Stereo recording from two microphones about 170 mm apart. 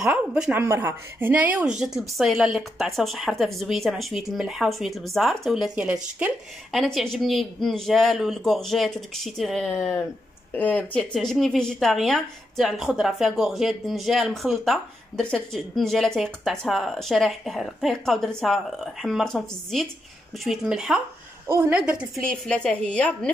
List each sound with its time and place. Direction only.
0.0 s speech: 5° right (ahead or behind)
9.8 s speech: 15° left (ahead or behind)